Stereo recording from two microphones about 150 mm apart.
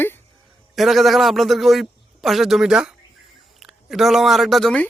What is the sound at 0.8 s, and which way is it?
A man's voice, centre (ahead or behind).